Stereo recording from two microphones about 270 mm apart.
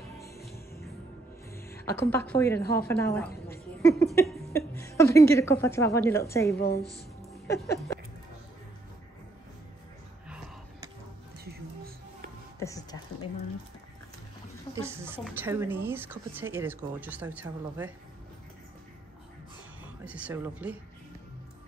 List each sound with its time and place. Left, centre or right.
1.5 s a woman's voice: centre
6.6 s a woman's voice: left
7.4 s a sound: centre
11.3 s music: right
12.5 s music: centre
14.8 s a woman's voice: centre
19.8 s a woman's voice: centre